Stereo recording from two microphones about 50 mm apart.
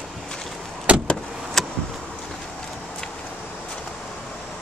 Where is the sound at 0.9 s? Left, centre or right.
Right.